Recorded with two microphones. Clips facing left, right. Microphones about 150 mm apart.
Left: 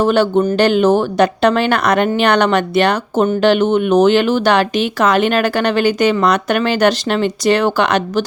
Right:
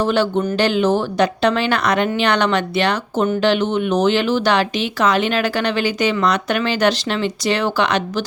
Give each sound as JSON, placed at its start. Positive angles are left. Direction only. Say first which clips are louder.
{"t": 0.0, "sound": "speech", "louder": "left 5 dB", "side_deg": 50}